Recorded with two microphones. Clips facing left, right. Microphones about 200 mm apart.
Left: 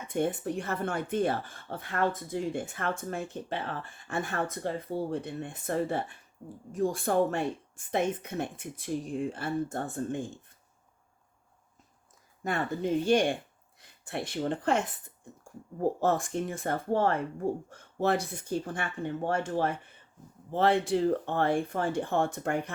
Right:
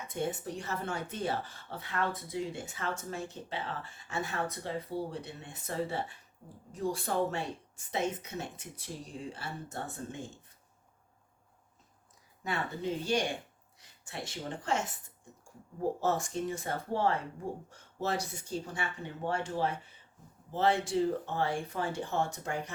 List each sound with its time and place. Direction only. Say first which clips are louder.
0.1 s speech: left 6 dB; 55° left (ahead or behind)
12.4 s speech: left 5 dB; 50° left (ahead or behind)